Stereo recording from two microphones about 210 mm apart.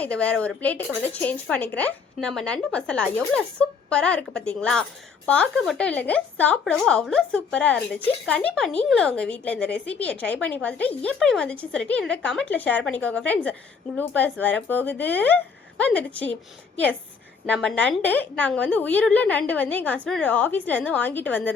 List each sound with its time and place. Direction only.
0.0 s a woman's voice: 5° left (ahead or behind)
17.4 s a woman's voice: 5° left (ahead or behind)